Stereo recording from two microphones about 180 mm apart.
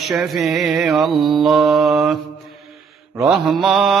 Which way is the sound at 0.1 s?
Centre (ahead or behind).